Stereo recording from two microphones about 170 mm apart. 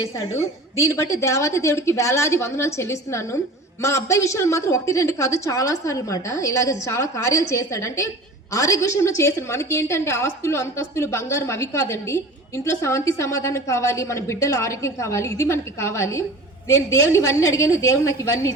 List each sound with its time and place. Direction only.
0.8 s a woman's voice: 20° left (ahead or behind)